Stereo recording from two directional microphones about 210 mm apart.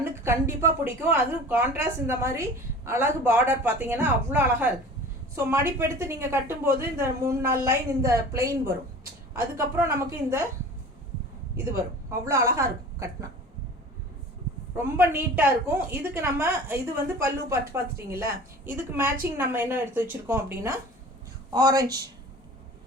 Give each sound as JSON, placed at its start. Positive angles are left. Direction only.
{"t": 0.0, "sound": "a woman's voice", "side_deg": -10}
{"t": 12.2, "sound": "a woman's voice", "side_deg": -15}
{"t": 14.9, "sound": "a woman's voice", "side_deg": -10}